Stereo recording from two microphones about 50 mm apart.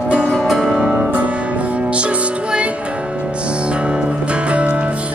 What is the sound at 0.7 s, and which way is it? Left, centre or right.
Music, centre.